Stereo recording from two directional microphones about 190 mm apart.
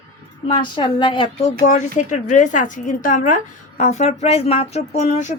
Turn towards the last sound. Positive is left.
turn(degrees=40)  # may be behind; listen again after turning